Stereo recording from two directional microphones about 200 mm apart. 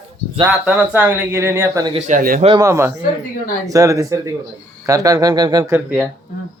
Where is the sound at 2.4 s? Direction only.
20° right (ahead or behind).